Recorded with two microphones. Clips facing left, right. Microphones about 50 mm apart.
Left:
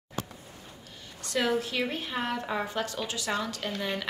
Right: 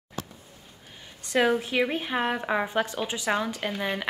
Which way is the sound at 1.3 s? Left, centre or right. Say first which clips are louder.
Right 5 dB; right.